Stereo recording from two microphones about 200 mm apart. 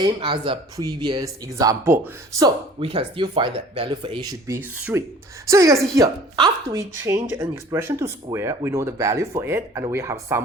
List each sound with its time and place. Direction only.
0.0 s speech: 25° right (ahead or behind)
2.8 s speech: 25° right (ahead or behind)